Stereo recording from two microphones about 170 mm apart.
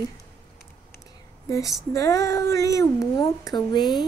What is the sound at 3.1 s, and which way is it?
Speech, 20° left (ahead or behind).